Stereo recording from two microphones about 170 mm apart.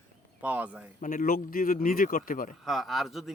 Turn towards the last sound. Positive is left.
turn(degrees=0)  # may be behind; listen again after turning